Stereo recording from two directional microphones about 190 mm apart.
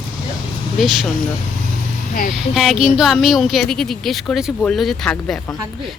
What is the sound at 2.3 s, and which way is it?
Speech, centre (ahead or behind).